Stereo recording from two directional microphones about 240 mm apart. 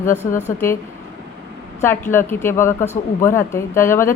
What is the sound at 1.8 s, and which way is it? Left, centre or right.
Speech, centre.